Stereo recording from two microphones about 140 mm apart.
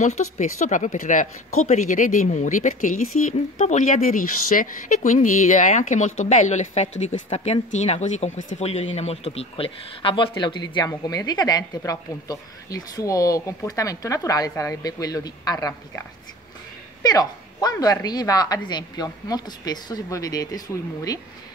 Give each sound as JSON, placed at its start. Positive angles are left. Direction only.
{"t": 0.0, "sound": "a woman's voice", "side_deg": 55}